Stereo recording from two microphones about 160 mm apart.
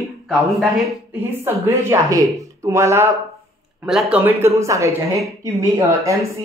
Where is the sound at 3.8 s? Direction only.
5° right (ahead or behind).